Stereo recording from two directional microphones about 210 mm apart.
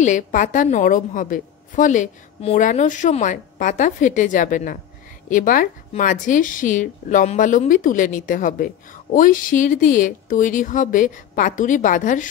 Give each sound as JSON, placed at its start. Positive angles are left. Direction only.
{"t": 0.0, "sound": "speech", "side_deg": 35}